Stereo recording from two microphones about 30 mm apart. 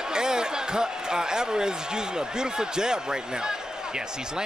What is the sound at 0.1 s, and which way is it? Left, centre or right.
Speech, right.